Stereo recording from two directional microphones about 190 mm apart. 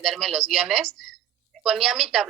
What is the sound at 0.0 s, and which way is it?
Speech, centre (ahead or behind).